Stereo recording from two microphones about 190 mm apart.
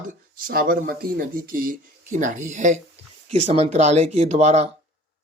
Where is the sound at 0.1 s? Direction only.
50° right (ahead or behind).